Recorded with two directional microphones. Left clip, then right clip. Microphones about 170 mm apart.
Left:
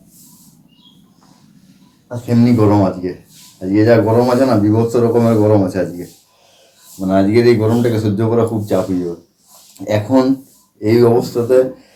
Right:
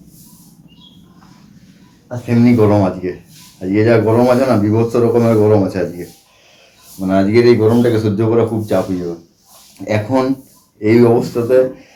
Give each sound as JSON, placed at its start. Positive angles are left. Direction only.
{"t": 2.0, "sound": "a man's voice", "side_deg": 15}
{"t": 7.1, "sound": "a man's voice", "side_deg": 15}
{"t": 9.7, "sound": "a man's voice", "side_deg": 20}